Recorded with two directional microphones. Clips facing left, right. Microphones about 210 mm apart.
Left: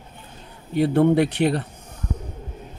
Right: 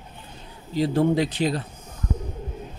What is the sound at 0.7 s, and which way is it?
Speech, 65° left (ahead or behind).